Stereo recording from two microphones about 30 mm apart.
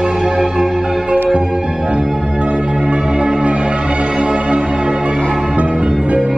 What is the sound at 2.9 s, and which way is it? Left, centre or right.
Change ringing, right.